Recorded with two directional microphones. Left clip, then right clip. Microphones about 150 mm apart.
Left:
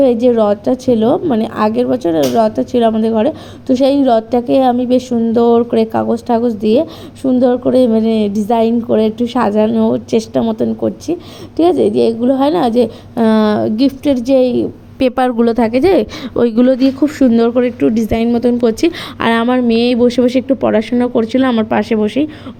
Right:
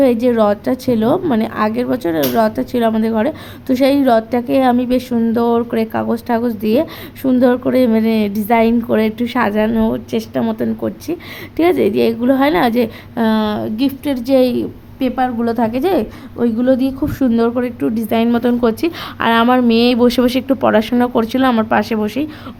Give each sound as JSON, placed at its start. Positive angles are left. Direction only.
{"t": 0.0, "sound": "a woman's voice", "side_deg": 0}
{"t": 9.9, "sound": "a woman's voice", "side_deg": 15}
{"t": 10.4, "sound": "a woman's voice", "side_deg": 5}
{"t": 13.2, "sound": "a woman's voice", "side_deg": 20}
{"t": 14.9, "sound": "a woman's voice", "side_deg": 65}
{"t": 15.4, "sound": "a woman's voice", "side_deg": 20}
{"t": 16.7, "sound": "a woman's voice", "side_deg": 10}
{"t": 19.5, "sound": "a woman's voice", "side_deg": -5}